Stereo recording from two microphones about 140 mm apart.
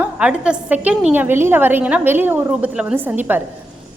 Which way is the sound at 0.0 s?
5° right (ahead or behind).